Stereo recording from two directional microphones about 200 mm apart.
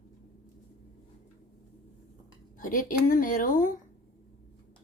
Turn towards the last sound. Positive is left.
turn(degrees=40)  # may be behind; listen again after turning